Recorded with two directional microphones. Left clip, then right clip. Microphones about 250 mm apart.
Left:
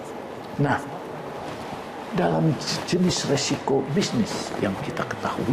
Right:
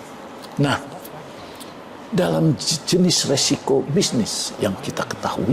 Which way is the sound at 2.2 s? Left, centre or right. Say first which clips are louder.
Right 3 dB; right.